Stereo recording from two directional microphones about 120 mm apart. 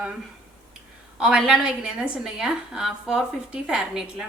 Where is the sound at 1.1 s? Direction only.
5° right (ahead or behind).